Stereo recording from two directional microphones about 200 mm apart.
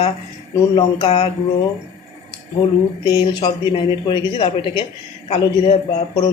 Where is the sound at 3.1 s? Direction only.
20° left (ahead or behind).